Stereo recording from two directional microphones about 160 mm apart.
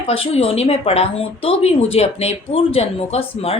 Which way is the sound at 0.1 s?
35° left (ahead or behind).